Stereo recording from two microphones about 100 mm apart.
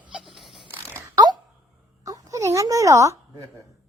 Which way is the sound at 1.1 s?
40° right (ahead or behind).